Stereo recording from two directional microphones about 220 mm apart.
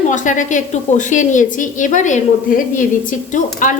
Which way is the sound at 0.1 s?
35° left (ahead or behind).